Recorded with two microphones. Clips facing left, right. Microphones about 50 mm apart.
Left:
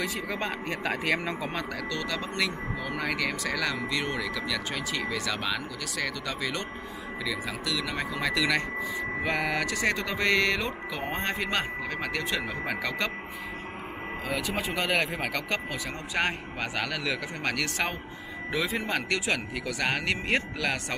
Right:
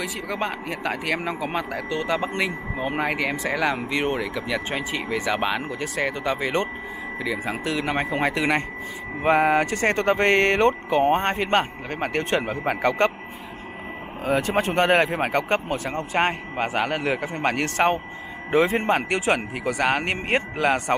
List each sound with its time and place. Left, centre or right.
0.0 s speech: centre
1.5 s speech: centre; by 13.1 s right
14.2 s speech: right
14.9 s speech: right